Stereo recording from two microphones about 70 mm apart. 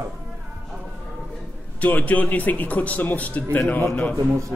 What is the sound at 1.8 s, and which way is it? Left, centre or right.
A man's voice, left.